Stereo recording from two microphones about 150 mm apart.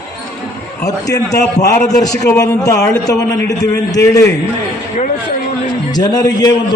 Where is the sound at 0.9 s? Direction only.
25° left (ahead or behind).